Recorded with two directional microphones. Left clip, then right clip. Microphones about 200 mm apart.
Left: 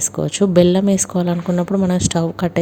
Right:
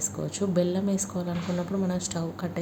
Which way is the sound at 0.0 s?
45° left (ahead or behind).